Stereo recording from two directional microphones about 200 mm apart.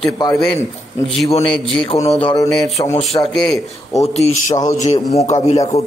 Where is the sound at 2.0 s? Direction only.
30° left (ahead or behind).